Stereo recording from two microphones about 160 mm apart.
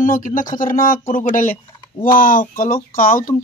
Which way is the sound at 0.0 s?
60° left (ahead or behind).